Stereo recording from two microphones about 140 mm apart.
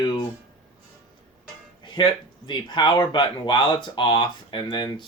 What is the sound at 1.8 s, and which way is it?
Music, 35° left (ahead or behind).